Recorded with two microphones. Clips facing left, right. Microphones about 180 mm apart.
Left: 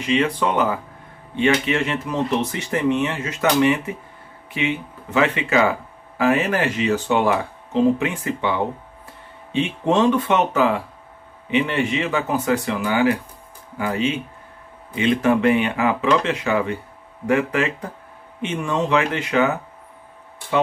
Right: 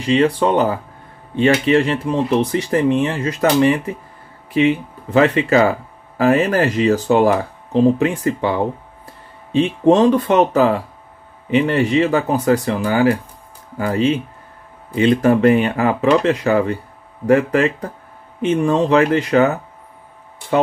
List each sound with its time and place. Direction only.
0.0 s speech: 35° right (ahead or behind)
20.5 s speech: 45° right (ahead or behind)